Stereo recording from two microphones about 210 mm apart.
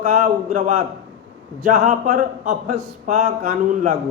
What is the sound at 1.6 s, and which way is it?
A man's voice, 40° right (ahead or behind).